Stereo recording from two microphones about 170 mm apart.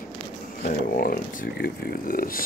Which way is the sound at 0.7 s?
60° left (ahead or behind).